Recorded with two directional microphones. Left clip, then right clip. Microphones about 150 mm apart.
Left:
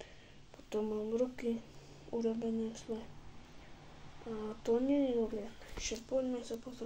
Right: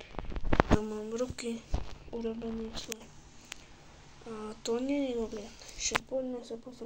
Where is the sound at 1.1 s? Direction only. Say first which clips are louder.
Even; 10° left (ahead or behind).